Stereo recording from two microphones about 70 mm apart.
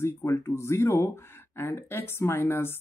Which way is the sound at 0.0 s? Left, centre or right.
Left.